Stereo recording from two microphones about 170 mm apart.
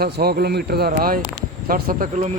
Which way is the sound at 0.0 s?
65° right (ahead or behind).